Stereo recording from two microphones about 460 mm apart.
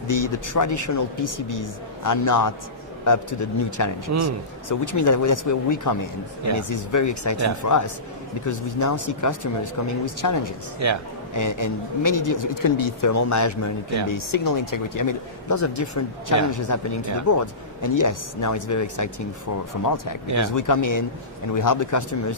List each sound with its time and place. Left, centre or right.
0.1 s speech: left
10.8 s speech: right
11.3 s speech: left
20.2 s speech: right
20.6 s speech: left